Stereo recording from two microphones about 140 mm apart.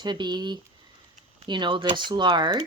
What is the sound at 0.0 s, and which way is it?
Speech, 30° right (ahead or behind).